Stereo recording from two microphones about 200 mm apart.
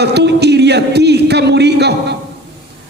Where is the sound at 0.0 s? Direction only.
55° right (ahead or behind).